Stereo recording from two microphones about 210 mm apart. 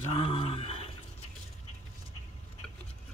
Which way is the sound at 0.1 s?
25° left (ahead or behind).